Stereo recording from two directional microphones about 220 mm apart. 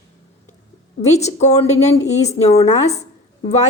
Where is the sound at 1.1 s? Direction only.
30° left (ahead or behind).